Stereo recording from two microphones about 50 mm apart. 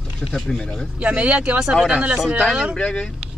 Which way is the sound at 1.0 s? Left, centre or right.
Right.